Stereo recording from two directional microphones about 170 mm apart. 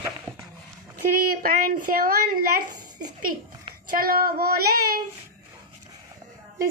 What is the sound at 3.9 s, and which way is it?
Speech, 55° right (ahead or behind).